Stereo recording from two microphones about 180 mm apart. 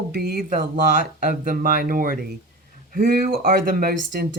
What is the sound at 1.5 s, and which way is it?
Speech, 50° right (ahead or behind).